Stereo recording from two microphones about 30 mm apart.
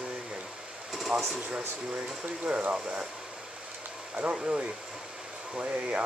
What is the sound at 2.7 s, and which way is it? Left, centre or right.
Speech, right.